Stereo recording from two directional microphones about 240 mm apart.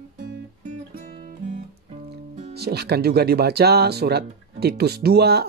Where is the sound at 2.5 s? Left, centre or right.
Right.